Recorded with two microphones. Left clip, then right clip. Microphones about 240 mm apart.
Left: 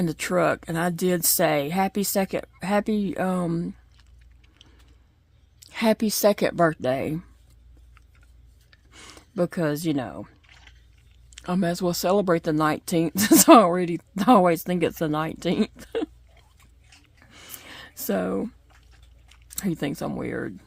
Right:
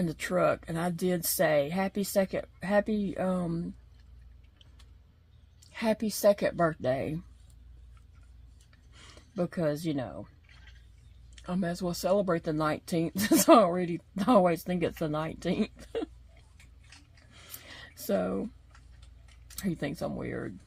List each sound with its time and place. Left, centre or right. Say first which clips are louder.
0.0 s speech: left 5 dB; left
5.5 s speech: left 7 dB; left
8.7 s a sound: left 8 dB; left
11.3 s speech: left 8 dB; left
17.3 s a sound: left 6 dB; left
19.3 s speech: left 6 dB; left